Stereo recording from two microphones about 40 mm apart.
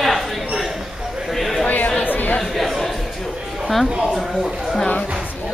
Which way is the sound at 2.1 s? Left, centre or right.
Left.